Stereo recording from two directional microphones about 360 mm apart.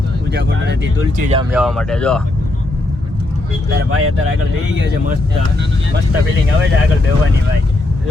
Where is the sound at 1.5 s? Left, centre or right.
Centre.